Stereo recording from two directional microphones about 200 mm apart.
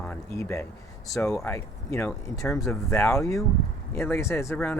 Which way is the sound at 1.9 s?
10° left (ahead or behind).